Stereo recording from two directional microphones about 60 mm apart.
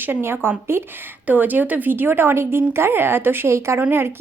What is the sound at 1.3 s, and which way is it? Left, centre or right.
Speech, right.